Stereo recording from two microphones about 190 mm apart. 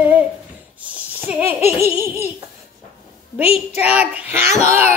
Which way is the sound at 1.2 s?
10° right (ahead or behind).